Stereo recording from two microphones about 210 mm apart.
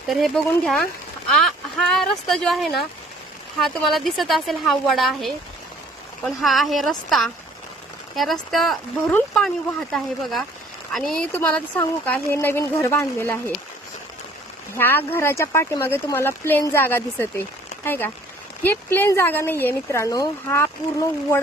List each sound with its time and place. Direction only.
0.1 s speech: centre (ahead or behind)
10.9 s speech: 5° left (ahead or behind)
14.7 s speech: 10° left (ahead or behind)